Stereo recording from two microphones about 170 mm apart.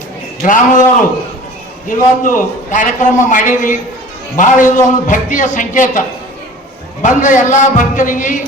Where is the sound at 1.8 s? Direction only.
50° left (ahead or behind).